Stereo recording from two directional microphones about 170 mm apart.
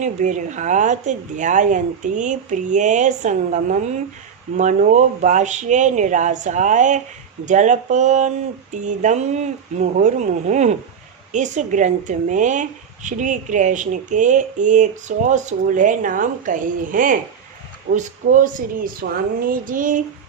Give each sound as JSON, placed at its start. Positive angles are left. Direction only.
{"t": 0.0, "sound": "speech", "side_deg": -45}